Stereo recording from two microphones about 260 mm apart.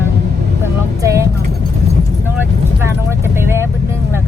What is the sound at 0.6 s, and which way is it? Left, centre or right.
Vehicle, centre.